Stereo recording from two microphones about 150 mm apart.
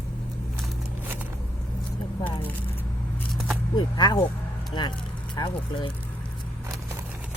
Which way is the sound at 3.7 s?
30° left (ahead or behind).